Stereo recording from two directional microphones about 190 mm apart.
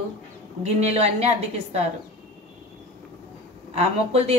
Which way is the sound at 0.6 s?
35° right (ahead or behind).